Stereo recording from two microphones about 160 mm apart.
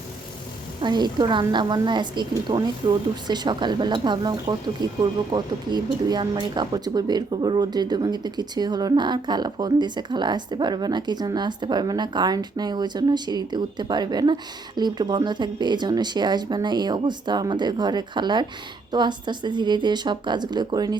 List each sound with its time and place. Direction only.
0.8 s speech: 30° right (ahead or behind)